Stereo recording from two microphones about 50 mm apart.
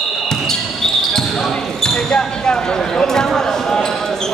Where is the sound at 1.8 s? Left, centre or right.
Centre.